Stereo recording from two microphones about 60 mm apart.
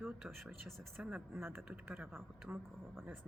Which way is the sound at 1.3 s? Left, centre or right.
Right.